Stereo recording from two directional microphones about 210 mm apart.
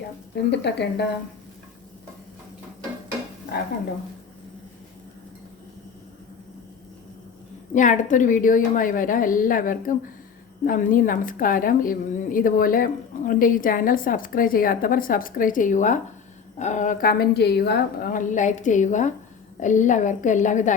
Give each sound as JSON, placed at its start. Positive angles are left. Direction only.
{"t": 0.5, "sound": "speech", "side_deg": 55}
{"t": 7.7, "sound": "a woman's voice", "side_deg": 35}